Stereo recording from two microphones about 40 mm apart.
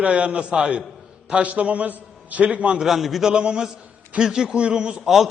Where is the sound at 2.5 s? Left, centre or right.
Right.